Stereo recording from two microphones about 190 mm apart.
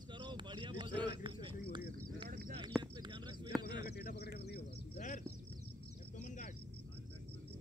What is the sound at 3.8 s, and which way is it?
Bird, 55° left (ahead or behind).